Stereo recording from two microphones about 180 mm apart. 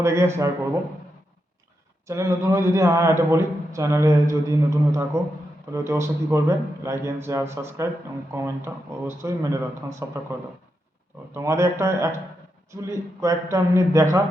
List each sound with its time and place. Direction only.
0.0 s a man's voice: 15° right (ahead or behind)
2.0 s a man's voice: 15° right (ahead or behind)